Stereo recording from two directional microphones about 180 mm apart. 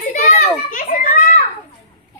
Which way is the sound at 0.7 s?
45° left (ahead or behind).